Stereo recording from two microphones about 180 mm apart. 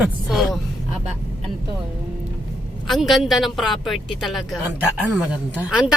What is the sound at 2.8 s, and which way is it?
A woman's voice, centre (ahead or behind).